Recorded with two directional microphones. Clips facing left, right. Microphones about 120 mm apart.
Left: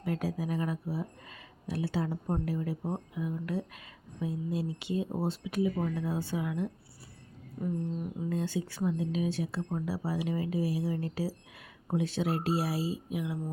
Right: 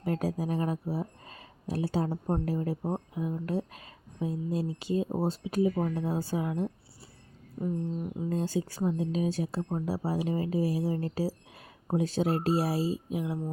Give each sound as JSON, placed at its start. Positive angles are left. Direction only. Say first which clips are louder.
{"t": 0.0, "sound": "speech", "louder": "right 3 dB", "side_deg": -40}
{"t": 7.6, "sound": "music", "louder": "right 2 dB", "side_deg": -25}
{"t": 8.3, "sound": "speech", "louder": "right 3 dB", "side_deg": -40}